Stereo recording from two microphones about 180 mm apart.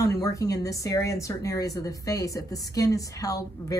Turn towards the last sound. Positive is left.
turn(degrees=20)  # may be behind; listen again after turning